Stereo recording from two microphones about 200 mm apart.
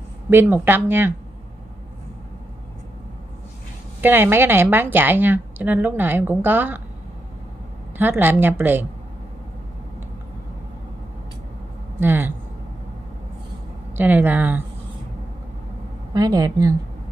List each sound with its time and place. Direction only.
0.3 s a woman's voice: 10° right (ahead or behind)
4.0 s a woman's voice: 10° right (ahead or behind)
8.0 s a woman's voice: 10° right (ahead or behind)
12.0 s a woman's voice: 10° right (ahead or behind)
13.9 s a woman's voice: 10° right (ahead or behind)
16.1 s a woman's voice: 20° right (ahead or behind)